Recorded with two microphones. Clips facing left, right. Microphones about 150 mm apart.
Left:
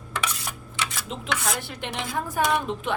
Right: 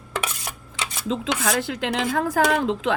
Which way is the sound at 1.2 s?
90° right.